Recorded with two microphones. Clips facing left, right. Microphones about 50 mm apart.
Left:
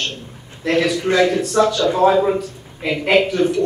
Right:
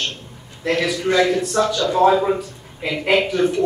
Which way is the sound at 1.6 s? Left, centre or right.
Centre.